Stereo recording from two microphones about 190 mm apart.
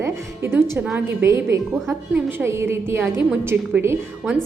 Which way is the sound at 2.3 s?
10° right (ahead or behind).